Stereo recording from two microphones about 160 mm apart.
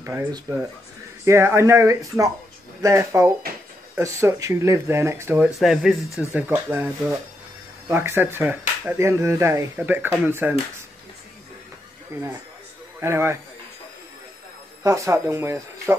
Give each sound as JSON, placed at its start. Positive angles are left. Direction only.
{"t": 0.0, "sound": "speech", "side_deg": -15}
{"t": 5.6, "sound": "speech", "side_deg": 0}
{"t": 6.1, "sound": "speech", "side_deg": -15}
{"t": 12.1, "sound": "speech", "side_deg": -15}
{"t": 14.8, "sound": "speech", "side_deg": -20}